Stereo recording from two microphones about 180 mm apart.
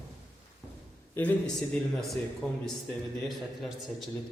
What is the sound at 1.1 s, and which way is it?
Mantra, 10° left (ahead or behind).